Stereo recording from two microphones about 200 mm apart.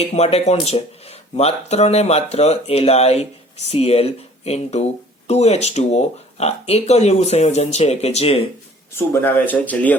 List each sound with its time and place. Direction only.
0.0 s speech: 30° left (ahead or behind)
8.9 s speech: 10° left (ahead or behind)